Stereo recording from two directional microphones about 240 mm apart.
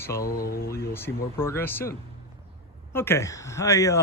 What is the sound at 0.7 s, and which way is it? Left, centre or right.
Speech, centre.